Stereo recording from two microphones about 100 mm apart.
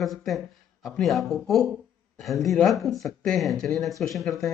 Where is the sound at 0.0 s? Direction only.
Centre (ahead or behind).